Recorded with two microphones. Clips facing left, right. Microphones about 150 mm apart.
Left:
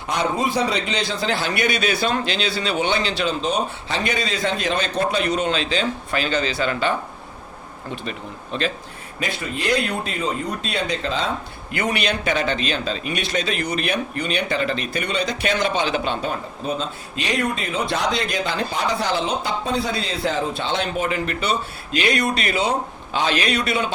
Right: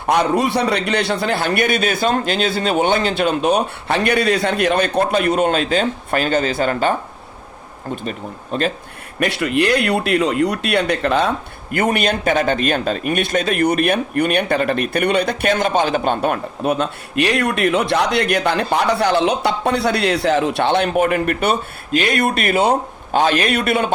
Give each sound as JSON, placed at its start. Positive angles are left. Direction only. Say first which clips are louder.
{"t": 0.1, "sound": "a man's voice", "louder": "right 6 dB", "side_deg": -70}
{"t": 8.5, "sound": "a man's voice", "louder": "right 4 dB", "side_deg": -45}
{"t": 9.2, "sound": "speech", "louder": "right 8 dB", "side_deg": -75}
{"t": 11.7, "sound": "a man's voice", "louder": "right 5 dB", "side_deg": -50}